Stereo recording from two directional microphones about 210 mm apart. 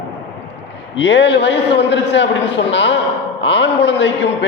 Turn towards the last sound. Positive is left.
turn(degrees=60)  # may be behind; listen again after turning